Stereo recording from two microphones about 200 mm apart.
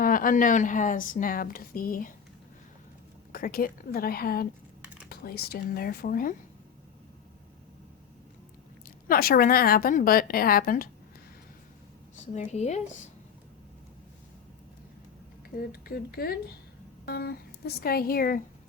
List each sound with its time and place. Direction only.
0.0 s a woman's voice: 45° left (ahead or behind)
3.3 s a woman's voice: 45° left (ahead or behind)
9.0 s a woman's voice: 50° left (ahead or behind)
12.2 s a woman's voice: 35° left (ahead or behind)
15.4 s a woman's voice: 50° left (ahead or behind)